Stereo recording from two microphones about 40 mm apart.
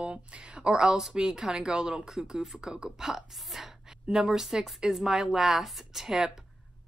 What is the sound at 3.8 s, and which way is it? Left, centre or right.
Speech, centre.